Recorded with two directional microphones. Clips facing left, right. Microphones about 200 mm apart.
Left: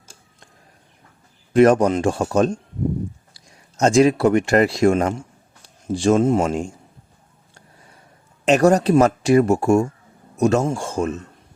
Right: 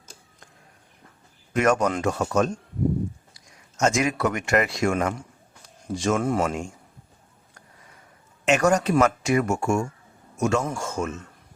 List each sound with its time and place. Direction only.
1.5 s speech: 30° left (ahead or behind)
8.4 s speech: 35° left (ahead or behind)